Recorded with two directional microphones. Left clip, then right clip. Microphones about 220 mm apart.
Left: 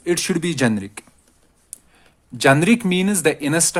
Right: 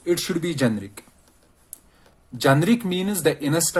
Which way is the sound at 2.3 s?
35° left (ahead or behind).